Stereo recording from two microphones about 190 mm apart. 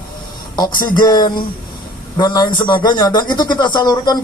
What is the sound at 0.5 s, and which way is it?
A man's voice, 20° left (ahead or behind).